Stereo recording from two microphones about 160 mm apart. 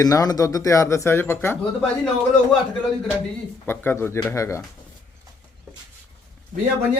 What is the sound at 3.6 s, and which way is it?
Speech, 15° left (ahead or behind).